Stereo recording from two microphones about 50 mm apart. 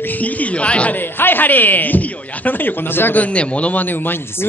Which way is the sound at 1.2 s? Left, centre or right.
Left.